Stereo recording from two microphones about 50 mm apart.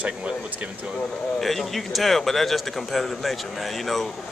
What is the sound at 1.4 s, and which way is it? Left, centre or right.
Speech, centre.